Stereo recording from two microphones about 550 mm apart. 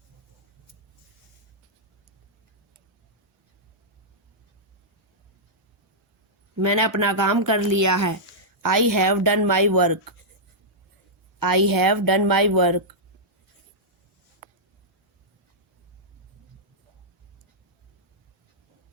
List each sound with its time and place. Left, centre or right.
6.7 s speech: right
11.3 s speech: right